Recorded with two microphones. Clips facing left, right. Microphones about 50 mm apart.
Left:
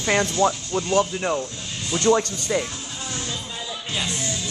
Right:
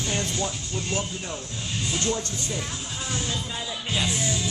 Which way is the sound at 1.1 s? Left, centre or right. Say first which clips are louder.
Left 9 dB; left.